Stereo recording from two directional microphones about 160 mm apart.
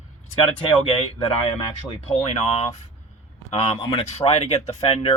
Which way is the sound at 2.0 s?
45° left (ahead or behind).